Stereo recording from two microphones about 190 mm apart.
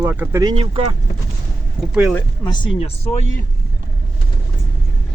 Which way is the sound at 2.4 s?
25° left (ahead or behind).